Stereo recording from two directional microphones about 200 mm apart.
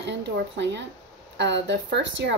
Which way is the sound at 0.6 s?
60° right (ahead or behind).